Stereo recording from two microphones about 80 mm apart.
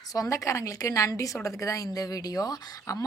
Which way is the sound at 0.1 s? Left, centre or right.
Left.